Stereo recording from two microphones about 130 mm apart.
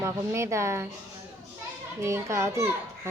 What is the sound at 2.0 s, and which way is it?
Speech, 20° right (ahead or behind).